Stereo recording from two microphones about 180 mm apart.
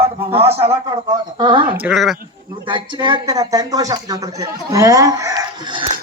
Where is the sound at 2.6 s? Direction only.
25° right (ahead or behind).